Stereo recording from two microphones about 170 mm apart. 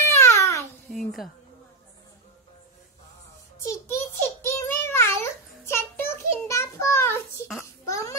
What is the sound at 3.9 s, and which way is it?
Child singing, 15° left (ahead or behind).